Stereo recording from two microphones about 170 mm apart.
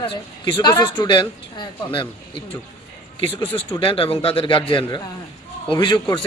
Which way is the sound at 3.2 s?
35° left (ahead or behind).